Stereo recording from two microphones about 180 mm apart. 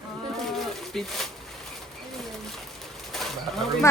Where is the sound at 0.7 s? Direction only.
Centre (ahead or behind).